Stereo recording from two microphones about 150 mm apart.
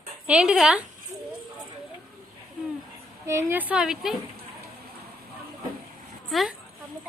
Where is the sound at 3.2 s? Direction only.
15° right (ahead or behind).